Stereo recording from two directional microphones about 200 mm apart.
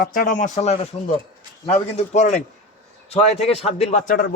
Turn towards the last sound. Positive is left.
turn(degrees=40)  # may be behind; listen again after turning